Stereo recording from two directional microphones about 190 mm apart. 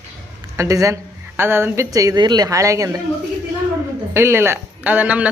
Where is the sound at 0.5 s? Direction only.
15° right (ahead or behind).